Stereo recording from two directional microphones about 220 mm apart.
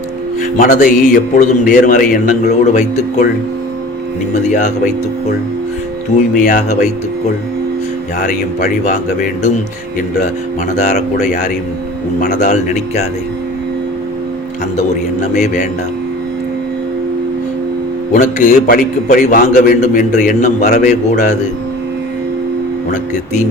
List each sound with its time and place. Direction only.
0.5 s a man's voice: 35° left (ahead or behind)
4.4 s a man's voice: 30° left (ahead or behind)
6.4 s a man's voice: 40° left (ahead or behind)
10.8 s a man's voice: 35° left (ahead or behind)
15.2 s a man's voice: 30° left (ahead or behind)
18.1 s a man's voice: 35° left (ahead or behind)
22.9 s speech: 35° left (ahead or behind)